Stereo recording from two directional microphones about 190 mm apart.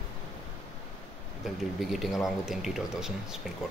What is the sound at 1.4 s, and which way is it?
Speech, centre (ahead or behind).